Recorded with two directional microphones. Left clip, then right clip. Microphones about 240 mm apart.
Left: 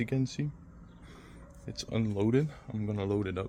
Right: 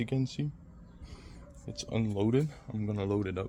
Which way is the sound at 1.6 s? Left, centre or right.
Centre.